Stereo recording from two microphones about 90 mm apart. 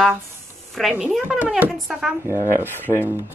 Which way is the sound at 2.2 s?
35° right (ahead or behind).